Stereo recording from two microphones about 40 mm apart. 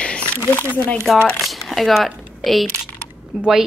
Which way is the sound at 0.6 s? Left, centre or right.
Left.